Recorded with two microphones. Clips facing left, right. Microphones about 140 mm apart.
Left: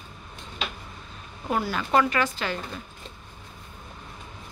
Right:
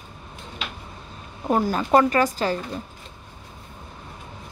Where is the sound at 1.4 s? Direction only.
40° right (ahead or behind).